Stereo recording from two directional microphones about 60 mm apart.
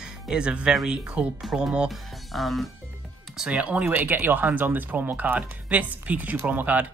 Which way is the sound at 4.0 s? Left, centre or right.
Right.